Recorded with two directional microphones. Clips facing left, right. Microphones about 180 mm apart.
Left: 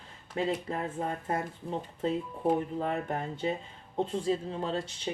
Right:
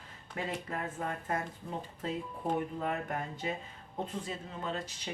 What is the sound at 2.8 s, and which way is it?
Speech, 30° left (ahead or behind).